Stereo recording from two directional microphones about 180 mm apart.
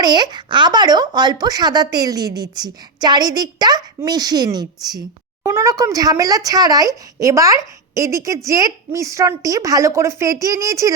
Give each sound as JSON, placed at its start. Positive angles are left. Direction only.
{"t": 0.0, "sound": "a woman's voice", "side_deg": -25}